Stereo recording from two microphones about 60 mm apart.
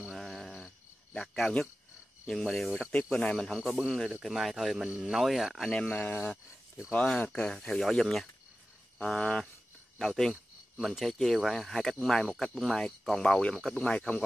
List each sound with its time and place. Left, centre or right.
0.0 s a sound: centre
1.1 s speech: centre
4.8 s speech: centre
5.1 s speech: centre
5.7 s speech: centre
7.1 s speech: centre
13.6 s speech: centre